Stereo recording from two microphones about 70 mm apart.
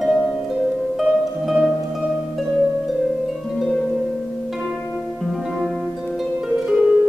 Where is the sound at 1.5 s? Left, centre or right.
Centre.